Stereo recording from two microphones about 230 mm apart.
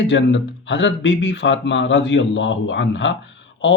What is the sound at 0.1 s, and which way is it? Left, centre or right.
Speech, left.